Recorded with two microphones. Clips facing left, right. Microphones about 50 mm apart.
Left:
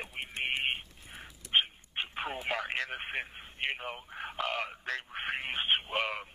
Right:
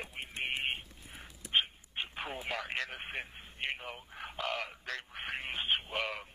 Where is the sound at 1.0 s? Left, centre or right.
Centre.